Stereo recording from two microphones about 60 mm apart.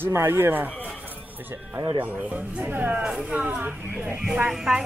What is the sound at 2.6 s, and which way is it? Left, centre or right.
Speech, right.